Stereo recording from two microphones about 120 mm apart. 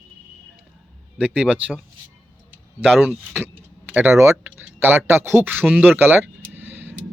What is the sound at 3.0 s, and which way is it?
Speech, 15° right (ahead or behind).